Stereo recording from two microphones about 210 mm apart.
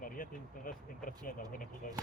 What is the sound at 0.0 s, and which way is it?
Speech, 40° left (ahead or behind).